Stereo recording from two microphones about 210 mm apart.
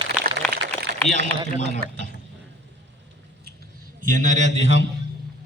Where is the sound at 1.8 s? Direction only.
45° right (ahead or behind).